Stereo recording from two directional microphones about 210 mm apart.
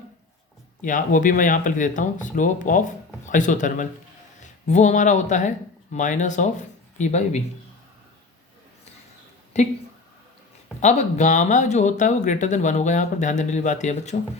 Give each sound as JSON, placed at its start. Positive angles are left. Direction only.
{"t": 0.8, "sound": "speech", "side_deg": 40}
{"t": 9.5, "sound": "speech", "side_deg": 30}
{"t": 10.8, "sound": "speech", "side_deg": 35}